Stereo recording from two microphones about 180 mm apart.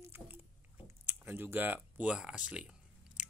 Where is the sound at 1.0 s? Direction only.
10° right (ahead or behind).